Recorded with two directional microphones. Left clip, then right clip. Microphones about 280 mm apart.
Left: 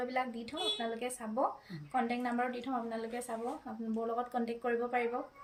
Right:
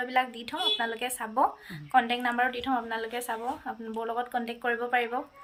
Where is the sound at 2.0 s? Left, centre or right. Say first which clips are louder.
Right 8 dB; centre.